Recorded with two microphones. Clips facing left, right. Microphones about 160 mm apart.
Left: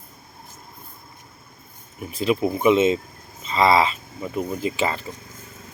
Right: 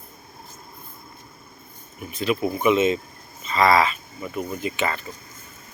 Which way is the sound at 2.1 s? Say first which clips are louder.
Left 2 dB; 25° left (ahead or behind).